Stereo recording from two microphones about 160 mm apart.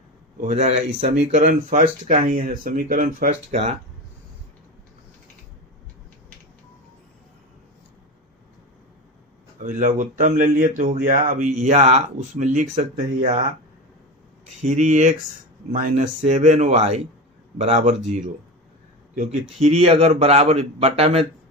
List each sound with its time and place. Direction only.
0.4 s speech: 45° right (ahead or behind)
3.5 s speech: 45° right (ahead or behind)
9.6 s speech: 50° right (ahead or behind)
14.6 s speech: 50° right (ahead or behind)
19.5 s a man's voice: 45° right (ahead or behind)